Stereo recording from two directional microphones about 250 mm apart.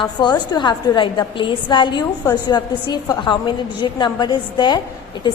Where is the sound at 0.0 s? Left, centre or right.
Centre.